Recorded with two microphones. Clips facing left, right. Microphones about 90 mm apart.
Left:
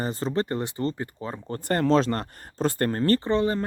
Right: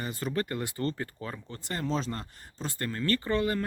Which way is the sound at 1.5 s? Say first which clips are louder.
Left 11 dB; 55° left (ahead or behind).